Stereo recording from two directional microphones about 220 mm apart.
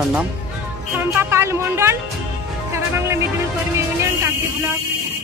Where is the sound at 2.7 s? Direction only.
10° right (ahead or behind).